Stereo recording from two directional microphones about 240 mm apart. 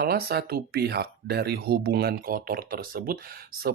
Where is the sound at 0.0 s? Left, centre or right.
Right.